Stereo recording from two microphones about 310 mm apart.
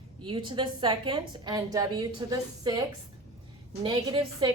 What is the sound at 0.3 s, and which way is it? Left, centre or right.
A woman's voice, centre.